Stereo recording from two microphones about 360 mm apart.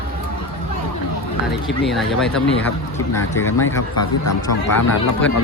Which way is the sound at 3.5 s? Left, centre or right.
Left.